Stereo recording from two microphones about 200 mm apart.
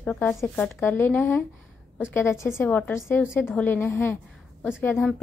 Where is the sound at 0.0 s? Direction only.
5° left (ahead or behind).